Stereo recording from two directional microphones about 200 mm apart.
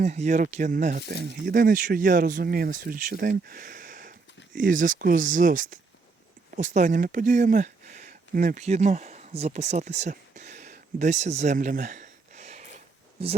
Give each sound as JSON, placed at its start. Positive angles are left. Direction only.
{"t": 0.0, "sound": "speech", "side_deg": -35}